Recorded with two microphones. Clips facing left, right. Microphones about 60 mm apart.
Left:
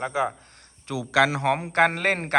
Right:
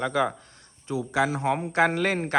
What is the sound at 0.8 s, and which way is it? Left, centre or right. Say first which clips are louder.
A man's voice: left 4 dB; left.